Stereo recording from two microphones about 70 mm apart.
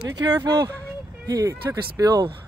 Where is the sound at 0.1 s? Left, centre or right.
Right.